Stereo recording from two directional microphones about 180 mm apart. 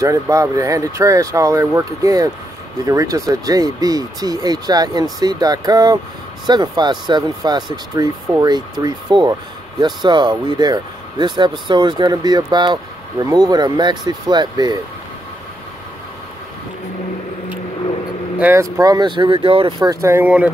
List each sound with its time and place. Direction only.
0.0 s speech: 20° right (ahead or behind)
18.4 s speech: 15° right (ahead or behind)